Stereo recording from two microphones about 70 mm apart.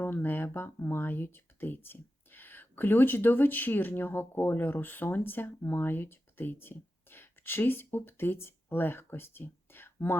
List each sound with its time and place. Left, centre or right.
0.0 s speech: left